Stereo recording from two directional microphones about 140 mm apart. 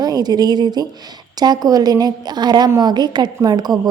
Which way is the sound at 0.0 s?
30° right (ahead or behind).